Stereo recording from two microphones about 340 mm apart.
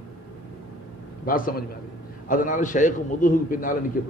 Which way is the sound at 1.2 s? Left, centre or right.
Left.